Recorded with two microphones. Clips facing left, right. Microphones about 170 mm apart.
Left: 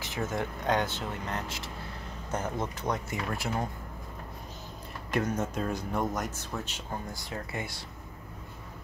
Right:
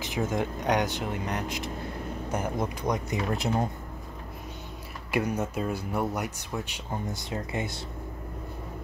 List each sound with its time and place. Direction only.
0.0 s speech: 15° right (ahead or behind)
5.1 s speech: 10° right (ahead or behind)